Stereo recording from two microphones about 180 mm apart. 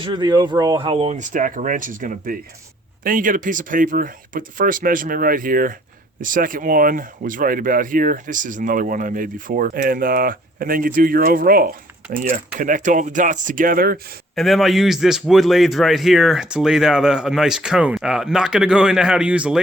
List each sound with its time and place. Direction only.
0.0 s speech: 25° right (ahead or behind); by 14.0 s 55° right (ahead or behind)
14.3 s a man's voice: centre (ahead or behind)